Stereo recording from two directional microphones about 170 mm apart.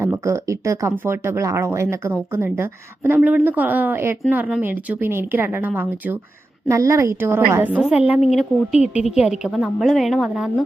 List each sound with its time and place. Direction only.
0.0 s a woman's voice: 15° right (ahead or behind)